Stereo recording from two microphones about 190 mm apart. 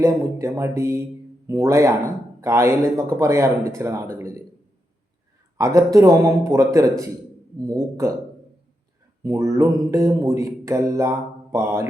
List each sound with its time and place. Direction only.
0.0 s speech: 15° right (ahead or behind)
5.5 s speech: 15° right (ahead or behind)
9.2 s speech: 20° right (ahead or behind)